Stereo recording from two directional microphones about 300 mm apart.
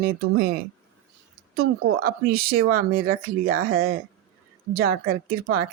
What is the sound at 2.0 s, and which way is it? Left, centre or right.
Speech, right.